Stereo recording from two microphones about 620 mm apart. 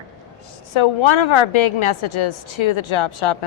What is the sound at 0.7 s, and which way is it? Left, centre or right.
A woman's voice, left.